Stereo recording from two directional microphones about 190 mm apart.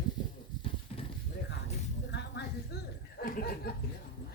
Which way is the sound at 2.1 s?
60° left (ahead or behind).